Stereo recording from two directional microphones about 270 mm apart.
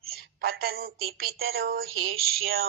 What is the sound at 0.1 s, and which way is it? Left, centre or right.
A woman's voice, right.